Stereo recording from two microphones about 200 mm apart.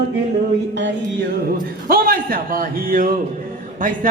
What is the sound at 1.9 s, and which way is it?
Speech, 45° right (ahead or behind).